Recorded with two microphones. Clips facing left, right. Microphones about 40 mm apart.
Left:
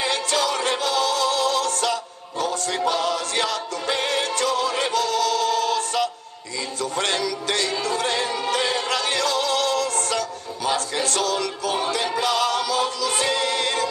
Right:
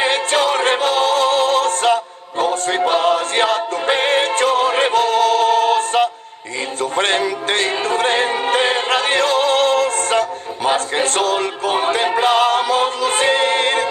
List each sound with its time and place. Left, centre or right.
0.0 s music: right